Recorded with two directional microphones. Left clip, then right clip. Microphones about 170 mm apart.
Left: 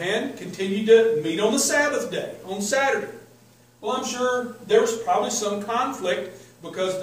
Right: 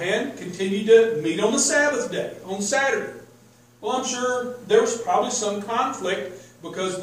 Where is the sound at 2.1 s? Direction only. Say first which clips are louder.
Right 1 dB; 10° left (ahead or behind).